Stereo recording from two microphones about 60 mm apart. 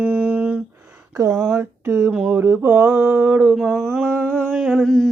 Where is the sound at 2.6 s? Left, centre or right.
Right.